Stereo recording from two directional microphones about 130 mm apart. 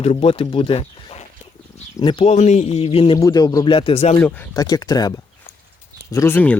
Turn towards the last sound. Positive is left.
turn(degrees=15)  # may be behind; listen again after turning